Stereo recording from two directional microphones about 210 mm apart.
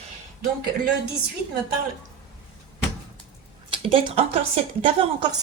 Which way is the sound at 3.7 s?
25° right (ahead or behind).